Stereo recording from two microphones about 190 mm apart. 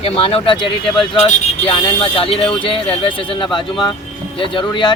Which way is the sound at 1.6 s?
30° left (ahead or behind).